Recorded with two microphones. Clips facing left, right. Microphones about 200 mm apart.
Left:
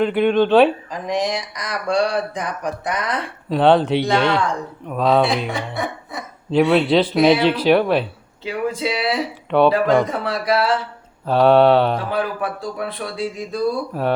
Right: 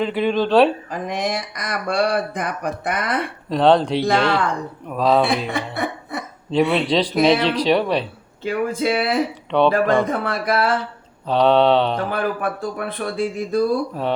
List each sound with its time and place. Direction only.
0.0 s speech: centre (ahead or behind)
0.9 s speech: 55° right (ahead or behind)
3.5 s speech: 5° left (ahead or behind)
5.5 s speech: 55° right (ahead or behind)
6.5 s speech: centre (ahead or behind)
8.4 s speech: 50° right (ahead or behind)
9.5 s speech: 5° left (ahead or behind)
9.7 s speech: 50° right (ahead or behind)
11.3 s mantra: 5° left (ahead or behind)
12.1 s speech: 55° right (ahead or behind)